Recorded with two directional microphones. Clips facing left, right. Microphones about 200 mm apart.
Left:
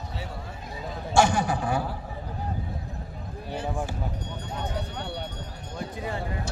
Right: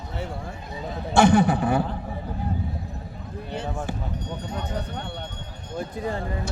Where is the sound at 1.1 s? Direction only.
60° right (ahead or behind).